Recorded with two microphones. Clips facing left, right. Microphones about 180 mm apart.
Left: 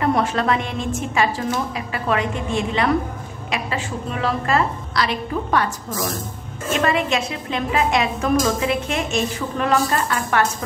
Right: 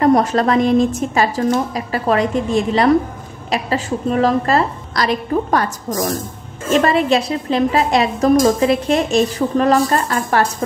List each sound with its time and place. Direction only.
0.0 s a woman's voice: 40° right (ahead or behind)